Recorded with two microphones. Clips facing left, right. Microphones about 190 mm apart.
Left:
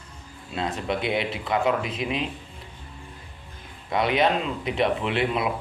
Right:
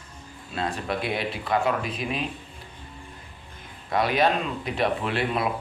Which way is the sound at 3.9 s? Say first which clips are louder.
Even; 20° left (ahead or behind).